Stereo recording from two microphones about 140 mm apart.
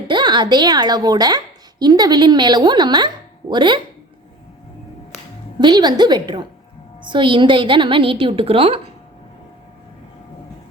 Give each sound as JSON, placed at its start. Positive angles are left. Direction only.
{"t": 0.1, "sound": "a woman's voice", "side_deg": -35}
{"t": 5.5, "sound": "a woman's voice", "side_deg": -30}